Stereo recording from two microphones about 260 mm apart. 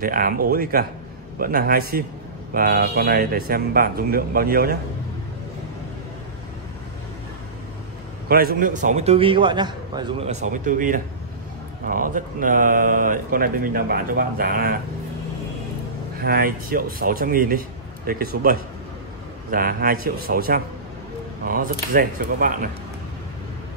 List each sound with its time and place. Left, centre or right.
0.0 s speech: right
8.3 s a man's voice: right
16.2 s speech: right